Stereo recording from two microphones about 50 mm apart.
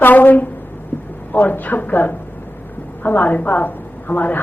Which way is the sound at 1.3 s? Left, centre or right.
Left.